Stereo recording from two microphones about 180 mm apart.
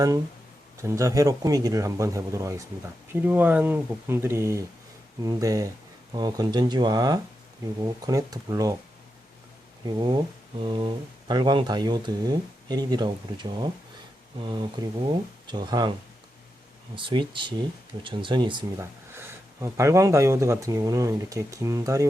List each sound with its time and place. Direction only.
0.8 s speech: 15° right (ahead or behind)
9.8 s speech: 25° right (ahead or behind)
16.9 s speech: 25° right (ahead or behind)
19.1 s speech: 15° right (ahead or behind)